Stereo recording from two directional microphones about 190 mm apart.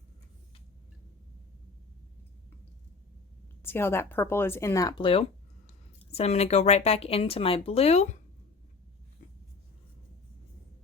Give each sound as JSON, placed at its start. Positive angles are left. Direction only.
{"t": 3.6, "sound": "speech", "side_deg": 10}